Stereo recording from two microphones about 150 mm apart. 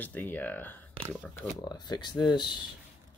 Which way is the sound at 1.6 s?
30° left (ahead or behind).